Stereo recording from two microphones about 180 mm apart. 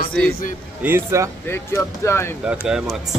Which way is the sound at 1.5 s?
15° left (ahead or behind).